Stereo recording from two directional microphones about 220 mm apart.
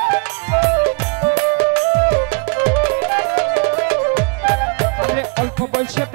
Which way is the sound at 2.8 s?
15° right (ahead or behind).